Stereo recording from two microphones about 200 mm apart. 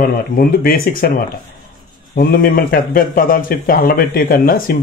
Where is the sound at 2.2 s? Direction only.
45° left (ahead or behind).